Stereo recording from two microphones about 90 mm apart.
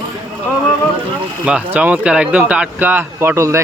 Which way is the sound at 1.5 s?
15° right (ahead or behind).